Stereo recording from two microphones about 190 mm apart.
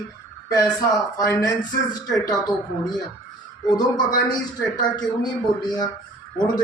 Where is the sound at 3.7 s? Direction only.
20° left (ahead or behind).